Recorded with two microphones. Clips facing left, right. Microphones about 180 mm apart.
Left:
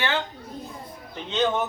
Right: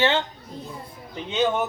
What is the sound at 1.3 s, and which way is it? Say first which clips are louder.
Speech: right 1 dB; 10° right (ahead or behind).